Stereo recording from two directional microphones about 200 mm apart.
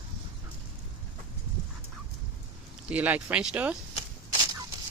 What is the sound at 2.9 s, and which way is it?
Speech, 10° right (ahead or behind).